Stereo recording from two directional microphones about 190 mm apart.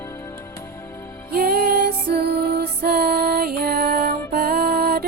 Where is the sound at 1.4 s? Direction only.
55° right (ahead or behind).